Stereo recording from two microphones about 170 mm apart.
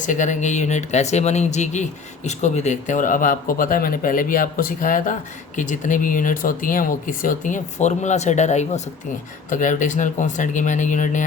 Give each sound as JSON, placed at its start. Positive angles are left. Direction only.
{"t": 0.0, "sound": "speech", "side_deg": 50}